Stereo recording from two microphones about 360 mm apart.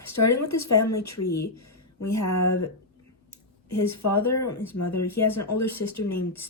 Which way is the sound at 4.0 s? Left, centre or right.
Left.